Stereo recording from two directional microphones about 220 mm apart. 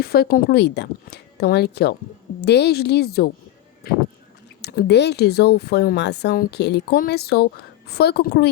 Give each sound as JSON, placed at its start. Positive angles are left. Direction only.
{"t": 0.0, "sound": "speech", "side_deg": 45}